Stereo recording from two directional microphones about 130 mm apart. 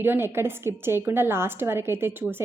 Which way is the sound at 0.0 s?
15° right (ahead or behind).